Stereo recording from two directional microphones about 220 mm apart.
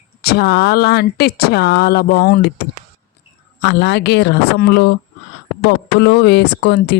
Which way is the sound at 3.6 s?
50° left (ahead or behind).